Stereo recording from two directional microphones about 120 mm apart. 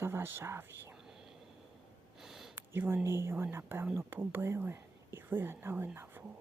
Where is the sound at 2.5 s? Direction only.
20° right (ahead or behind).